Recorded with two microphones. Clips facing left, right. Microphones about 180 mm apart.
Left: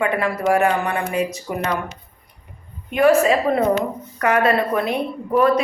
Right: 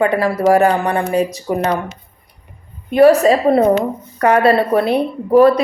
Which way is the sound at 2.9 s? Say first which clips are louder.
Right 5 dB; 35° right (ahead or behind).